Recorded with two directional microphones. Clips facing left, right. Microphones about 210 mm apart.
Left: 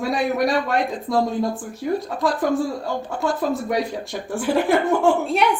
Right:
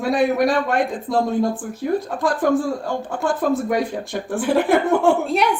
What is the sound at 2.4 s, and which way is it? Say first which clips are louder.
Speech: right 2 dB; 55° right (ahead or behind).